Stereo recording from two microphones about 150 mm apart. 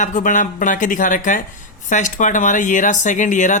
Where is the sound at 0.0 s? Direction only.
60° left (ahead or behind).